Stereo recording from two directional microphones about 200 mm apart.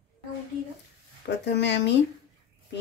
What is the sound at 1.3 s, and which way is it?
Speech, 60° left (ahead or behind).